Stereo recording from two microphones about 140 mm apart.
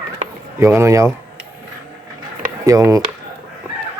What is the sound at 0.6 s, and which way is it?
Speech, 20° right (ahead or behind).